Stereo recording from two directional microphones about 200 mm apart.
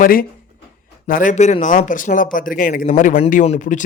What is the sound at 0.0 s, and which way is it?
Speech, 45° left (ahead or behind).